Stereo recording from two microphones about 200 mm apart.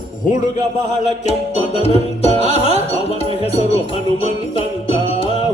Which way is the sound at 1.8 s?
30° left (ahead or behind).